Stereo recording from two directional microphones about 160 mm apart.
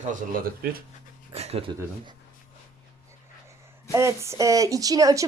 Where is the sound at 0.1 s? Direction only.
65° right (ahead or behind).